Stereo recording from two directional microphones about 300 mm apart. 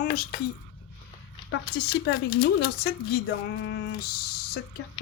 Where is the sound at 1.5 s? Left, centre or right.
Left.